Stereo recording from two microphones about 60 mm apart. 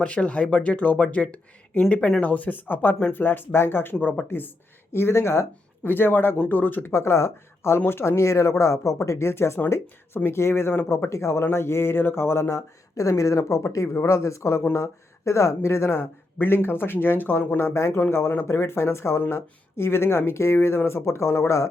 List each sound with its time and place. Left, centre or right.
0.0 s speech: centre
6.9 s speech: left
11.1 s speech: left
12.9 s speech: left
13.8 s speech: left
17.7 s speech: left